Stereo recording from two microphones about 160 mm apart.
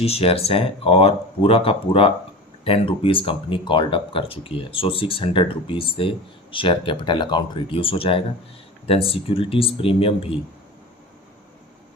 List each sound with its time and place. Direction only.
0.0 s speech: 40° left (ahead or behind)